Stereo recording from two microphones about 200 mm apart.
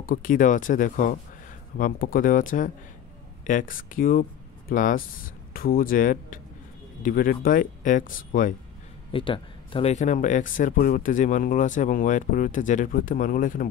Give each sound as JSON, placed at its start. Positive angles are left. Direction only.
{"t": 0.0, "sound": "speech", "side_deg": 45}
{"t": 9.1, "sound": "speech", "side_deg": 25}